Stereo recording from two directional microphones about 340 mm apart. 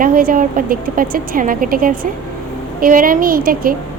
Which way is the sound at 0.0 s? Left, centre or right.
Right.